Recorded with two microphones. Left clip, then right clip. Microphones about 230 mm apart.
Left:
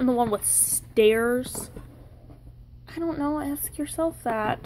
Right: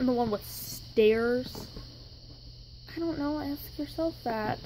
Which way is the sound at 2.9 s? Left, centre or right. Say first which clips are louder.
Left 4 dB; centre.